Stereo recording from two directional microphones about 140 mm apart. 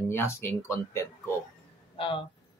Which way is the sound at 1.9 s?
40° left (ahead or behind).